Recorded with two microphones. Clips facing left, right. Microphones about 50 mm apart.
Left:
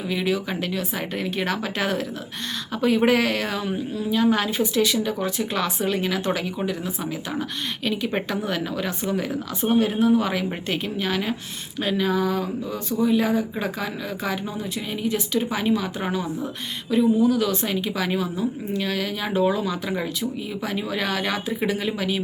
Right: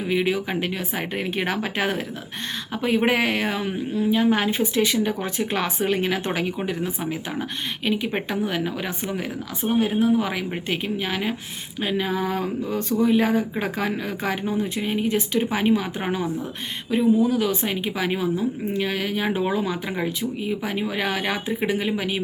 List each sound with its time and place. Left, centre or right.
0.1 s a woman's voice: right
8.1 s a woman's voice: centre
12.3 s a woman's voice: right